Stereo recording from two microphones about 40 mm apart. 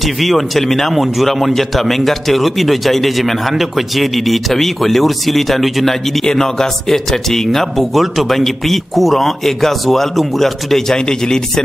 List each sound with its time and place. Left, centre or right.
0.0 s speech: centre
6.2 s a man's voice: centre